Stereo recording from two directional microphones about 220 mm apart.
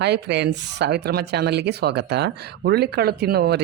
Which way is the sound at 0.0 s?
50° right (ahead or behind).